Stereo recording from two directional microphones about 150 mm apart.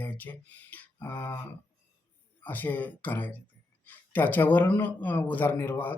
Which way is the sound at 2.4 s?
10° left (ahead or behind).